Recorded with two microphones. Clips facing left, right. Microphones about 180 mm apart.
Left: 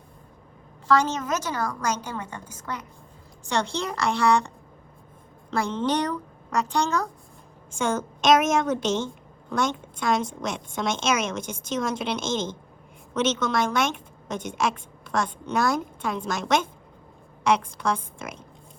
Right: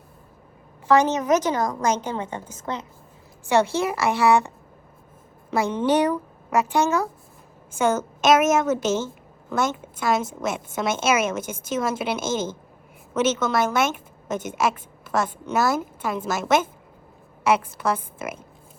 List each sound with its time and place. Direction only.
0.9 s a woman's voice: 15° right (ahead or behind)
3.5 s a woman's voice: 5° right (ahead or behind)